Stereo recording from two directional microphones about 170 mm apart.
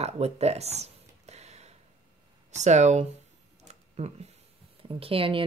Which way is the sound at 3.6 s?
40° right (ahead or behind).